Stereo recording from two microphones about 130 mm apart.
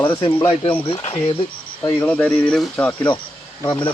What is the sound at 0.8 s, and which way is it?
Speech, 45° left (ahead or behind).